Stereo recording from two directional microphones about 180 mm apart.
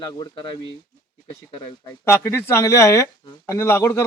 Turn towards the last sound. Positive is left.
turn(degrees=15)  # may be behind; listen again after turning